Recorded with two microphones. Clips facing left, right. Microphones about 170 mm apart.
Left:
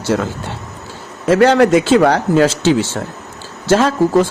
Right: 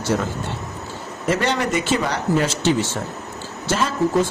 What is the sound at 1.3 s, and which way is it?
Speech, 85° left.